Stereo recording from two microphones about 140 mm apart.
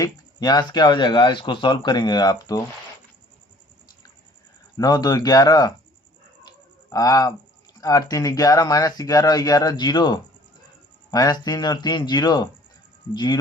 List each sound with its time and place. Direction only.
0.0 s speech: 30° left (ahead or behind)
4.8 s speech: 30° left (ahead or behind)
6.9 s speech: 25° left (ahead or behind)